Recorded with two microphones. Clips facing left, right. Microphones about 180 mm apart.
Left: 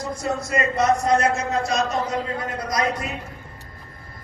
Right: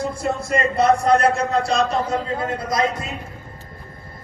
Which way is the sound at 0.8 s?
30° right (ahead or behind).